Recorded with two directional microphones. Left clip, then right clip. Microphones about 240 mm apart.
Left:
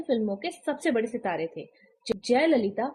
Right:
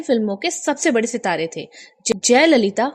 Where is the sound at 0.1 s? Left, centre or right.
Right.